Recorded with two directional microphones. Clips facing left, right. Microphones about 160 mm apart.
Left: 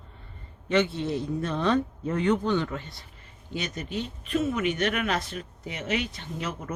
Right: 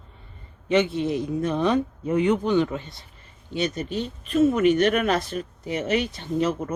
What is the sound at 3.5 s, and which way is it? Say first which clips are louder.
Speech: right 6 dB; 30° right (ahead or behind).